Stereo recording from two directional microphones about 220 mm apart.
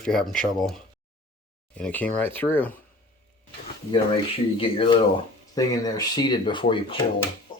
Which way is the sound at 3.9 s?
25° left (ahead or behind).